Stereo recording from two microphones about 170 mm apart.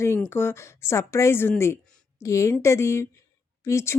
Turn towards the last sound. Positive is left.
turn(degrees=15)  # may be behind; listen again after turning